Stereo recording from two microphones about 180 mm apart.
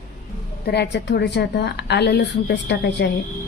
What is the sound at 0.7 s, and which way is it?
A woman's voice, 70° left (ahead or behind).